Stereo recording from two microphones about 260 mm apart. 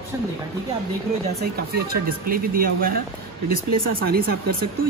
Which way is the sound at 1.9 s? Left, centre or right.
Right.